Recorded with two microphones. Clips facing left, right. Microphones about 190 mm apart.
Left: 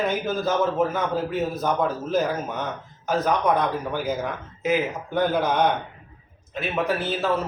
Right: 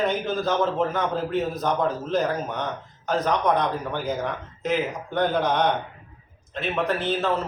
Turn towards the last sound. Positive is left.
turn(degrees=5)  # may be behind; listen again after turning